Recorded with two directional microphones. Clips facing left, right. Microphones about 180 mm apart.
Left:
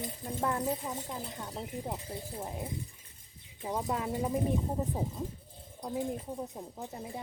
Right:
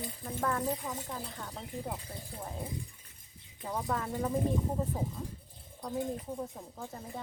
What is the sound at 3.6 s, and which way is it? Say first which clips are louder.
Speech: left 1 dB; 15° left (ahead or behind).